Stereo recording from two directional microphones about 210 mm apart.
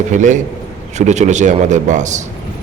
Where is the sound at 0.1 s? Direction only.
35° right (ahead or behind).